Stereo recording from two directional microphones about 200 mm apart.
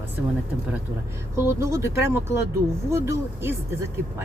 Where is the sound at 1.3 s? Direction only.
15° right (ahead or behind).